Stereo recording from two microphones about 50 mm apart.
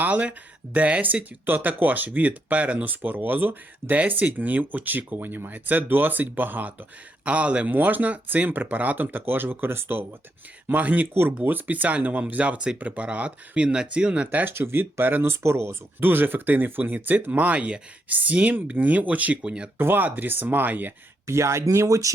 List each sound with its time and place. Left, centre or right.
0.0 s speech: right
1.5 s speech: right
7.3 s speech: right
7.7 s speech: right
10.8 s speech: right
11.1 s speech: right
11.4 s speech: right
14.3 s speech: right
15.3 s speech: right
16.0 s speech: right
19.8 s speech: right
21.2 s speech: right